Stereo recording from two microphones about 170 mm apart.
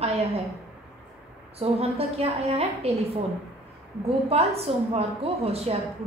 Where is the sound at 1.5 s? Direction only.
35° right (ahead or behind).